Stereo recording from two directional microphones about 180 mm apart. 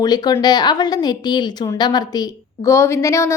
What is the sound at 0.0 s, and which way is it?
A woman's voice, 20° left (ahead or behind).